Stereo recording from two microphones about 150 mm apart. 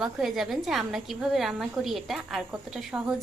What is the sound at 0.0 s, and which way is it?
A woman's voice, centre (ahead or behind).